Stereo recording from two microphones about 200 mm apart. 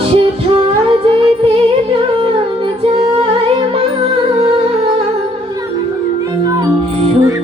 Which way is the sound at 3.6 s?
25° right (ahead or behind).